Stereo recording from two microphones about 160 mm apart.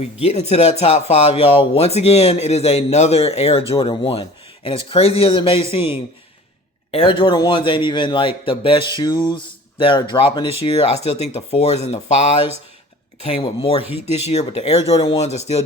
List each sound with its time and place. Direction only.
0.0 s speech: 45° left (ahead or behind)